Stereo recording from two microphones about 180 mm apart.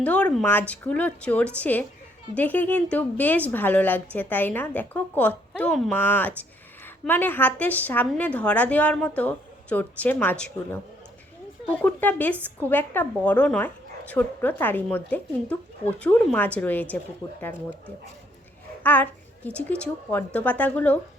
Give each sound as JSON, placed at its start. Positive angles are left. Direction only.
{"t": 0.0, "sound": "a woman's voice", "side_deg": 5}
{"t": 18.8, "sound": "a woman's voice", "side_deg": 10}